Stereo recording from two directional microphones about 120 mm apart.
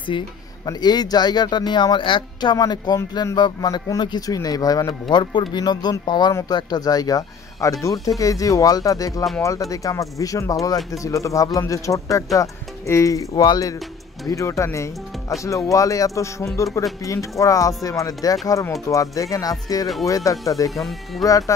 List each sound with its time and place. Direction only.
0.1 s speech: 45° left (ahead or behind)
5.1 s speech: 40° left (ahead or behind)
20.7 s speech: centre (ahead or behind)
21.2 s speech: 30° left (ahead or behind)